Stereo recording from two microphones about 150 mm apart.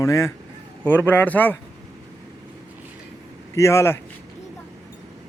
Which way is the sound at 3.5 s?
20° left (ahead or behind).